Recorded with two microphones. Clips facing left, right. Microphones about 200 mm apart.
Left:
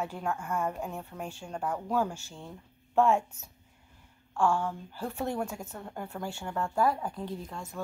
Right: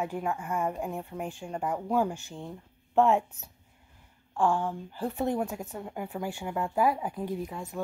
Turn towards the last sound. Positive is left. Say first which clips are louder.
# right 4 dB
turn(degrees=-15)  # may be behind; listen again after turning